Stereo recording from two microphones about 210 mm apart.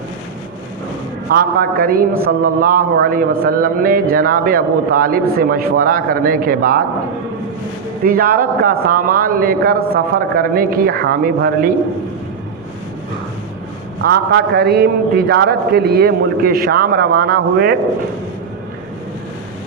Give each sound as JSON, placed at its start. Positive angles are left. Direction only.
{"t": 1.3, "sound": "a man's voice", "side_deg": -45}
{"t": 8.0, "sound": "a man's voice", "side_deg": -45}
{"t": 14.0, "sound": "a man's voice", "side_deg": -50}